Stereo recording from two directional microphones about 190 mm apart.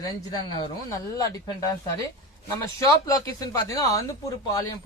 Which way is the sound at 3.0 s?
20° left (ahead or behind).